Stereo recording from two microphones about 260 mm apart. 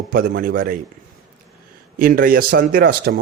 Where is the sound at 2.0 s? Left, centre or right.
Right.